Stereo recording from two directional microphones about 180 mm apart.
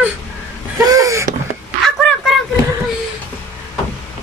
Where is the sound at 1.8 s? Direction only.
Centre (ahead or behind).